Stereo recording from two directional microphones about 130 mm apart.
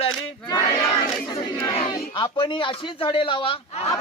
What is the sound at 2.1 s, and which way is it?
Speech, 40° left (ahead or behind).